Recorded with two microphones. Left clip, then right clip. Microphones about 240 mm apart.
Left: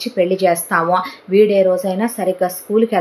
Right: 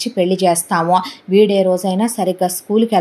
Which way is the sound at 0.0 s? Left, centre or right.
Right.